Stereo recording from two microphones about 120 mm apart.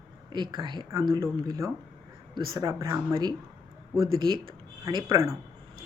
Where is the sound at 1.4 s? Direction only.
30° right (ahead or behind).